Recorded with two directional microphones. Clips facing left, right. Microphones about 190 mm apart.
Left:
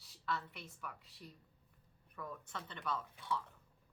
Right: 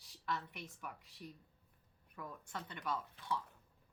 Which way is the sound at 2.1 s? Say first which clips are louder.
Even; 10° right (ahead or behind).